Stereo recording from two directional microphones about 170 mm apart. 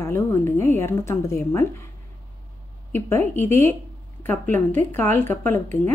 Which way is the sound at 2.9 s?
15° left (ahead or behind).